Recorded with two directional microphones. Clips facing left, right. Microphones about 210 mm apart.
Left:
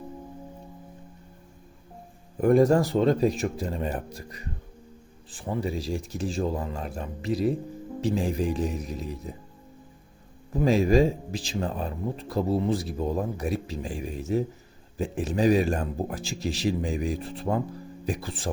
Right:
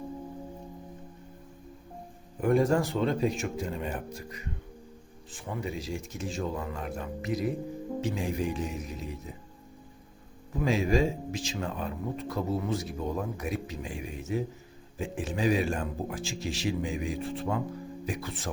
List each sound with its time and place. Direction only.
2.4 s speech: 40° left (ahead or behind)
10.5 s speech: 35° left (ahead or behind)